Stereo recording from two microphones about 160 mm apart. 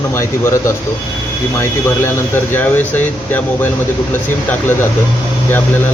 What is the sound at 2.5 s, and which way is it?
Speech, 10° left (ahead or behind).